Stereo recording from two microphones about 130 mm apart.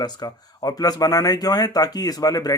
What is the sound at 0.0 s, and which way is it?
Speech, 30° left (ahead or behind).